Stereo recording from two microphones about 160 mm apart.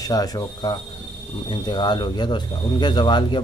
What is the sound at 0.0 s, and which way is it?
Speech, 25° left (ahead or behind).